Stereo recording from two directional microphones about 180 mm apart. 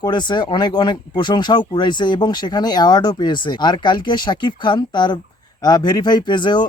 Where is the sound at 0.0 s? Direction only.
25° left (ahead or behind).